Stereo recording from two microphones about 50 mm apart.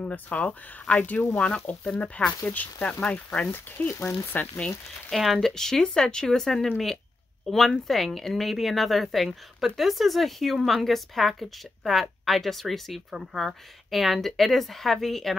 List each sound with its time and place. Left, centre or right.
0.0 s speech: left
2.4 s speech: left
3.4 s speech: left
5.1 s a woman's voice: centre